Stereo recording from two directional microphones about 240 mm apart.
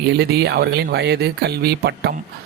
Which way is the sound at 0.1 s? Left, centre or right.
Right.